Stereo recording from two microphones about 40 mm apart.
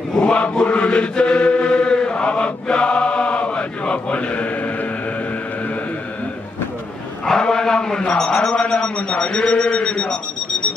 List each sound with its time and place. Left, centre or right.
0.2 s chant: left
7.2 s a sound: centre
8.0 s speech: left